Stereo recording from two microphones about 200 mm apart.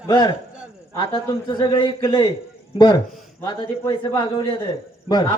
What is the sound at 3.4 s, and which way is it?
A man's voice, 20° left (ahead or behind).